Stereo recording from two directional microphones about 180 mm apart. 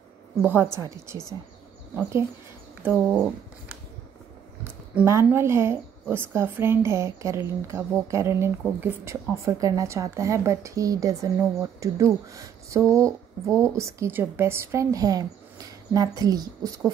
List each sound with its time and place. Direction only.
0.4 s a woman's voice: 10° right (ahead or behind)
4.9 s a woman's voice: 15° right (ahead or behind)